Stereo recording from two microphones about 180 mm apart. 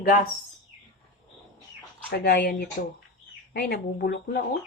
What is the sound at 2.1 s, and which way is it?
Speech, 65° left (ahead or behind).